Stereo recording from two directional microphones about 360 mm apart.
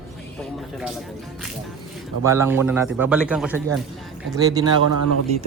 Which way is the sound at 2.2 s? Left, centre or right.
Centre.